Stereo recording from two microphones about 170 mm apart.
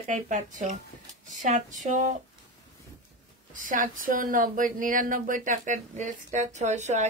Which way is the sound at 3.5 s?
50° right (ahead or behind).